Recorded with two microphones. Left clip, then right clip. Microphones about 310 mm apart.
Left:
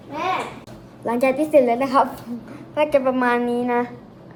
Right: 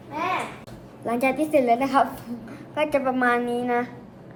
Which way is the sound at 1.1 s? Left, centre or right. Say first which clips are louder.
Left 4 dB; centre.